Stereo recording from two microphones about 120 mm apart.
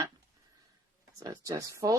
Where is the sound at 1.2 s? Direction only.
30° right (ahead or behind).